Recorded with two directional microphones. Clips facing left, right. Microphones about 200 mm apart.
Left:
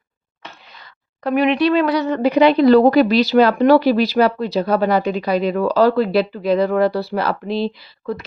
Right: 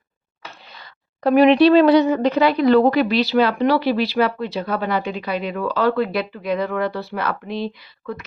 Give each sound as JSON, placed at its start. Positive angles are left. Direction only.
{"t": 1.2, "sound": "speech", "side_deg": -35}
{"t": 2.2, "sound": "a woman's voice", "side_deg": 15}
{"t": 2.6, "sound": "speech", "side_deg": 35}